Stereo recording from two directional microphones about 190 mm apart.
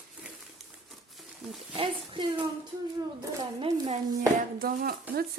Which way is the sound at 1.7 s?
25° right (ahead or behind).